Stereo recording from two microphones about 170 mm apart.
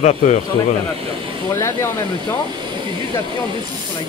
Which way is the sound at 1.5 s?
15° left (ahead or behind).